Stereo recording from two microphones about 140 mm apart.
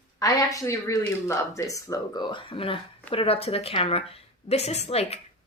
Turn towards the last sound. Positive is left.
turn(degrees=45)  # may be behind; listen again after turning